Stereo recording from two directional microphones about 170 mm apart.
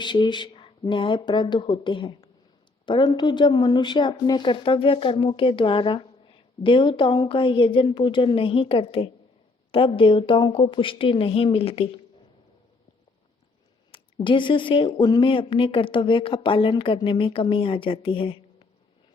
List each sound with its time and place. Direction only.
0.0 s speech: 25° left (ahead or behind)
13.9 s speech: 30° left (ahead or behind)